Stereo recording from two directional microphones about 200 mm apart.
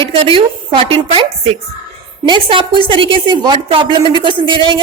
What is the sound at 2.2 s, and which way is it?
A woman's voice, 25° right (ahead or behind).